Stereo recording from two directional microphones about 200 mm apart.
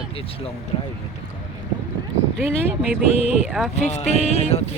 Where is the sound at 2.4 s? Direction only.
10° right (ahead or behind).